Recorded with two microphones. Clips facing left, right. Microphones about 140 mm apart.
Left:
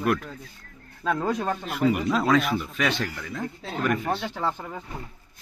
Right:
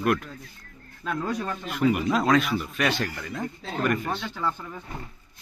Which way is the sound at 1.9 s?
Centre (ahead or behind).